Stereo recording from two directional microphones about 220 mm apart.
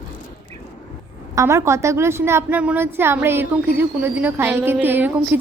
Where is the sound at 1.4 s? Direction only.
15° right (ahead or behind).